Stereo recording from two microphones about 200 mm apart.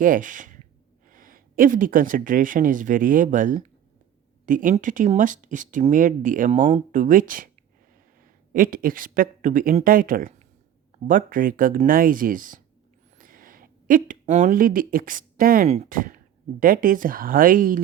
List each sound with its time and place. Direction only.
0.0 s speech: 40° right (ahead or behind)
8.5 s speech: 45° right (ahead or behind)